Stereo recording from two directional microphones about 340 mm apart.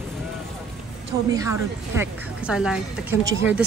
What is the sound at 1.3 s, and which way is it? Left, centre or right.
A woman's voice, centre.